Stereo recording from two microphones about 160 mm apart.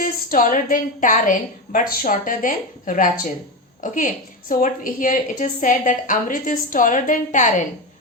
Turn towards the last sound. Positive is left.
turn(degrees=50)  # may be behind; listen again after turning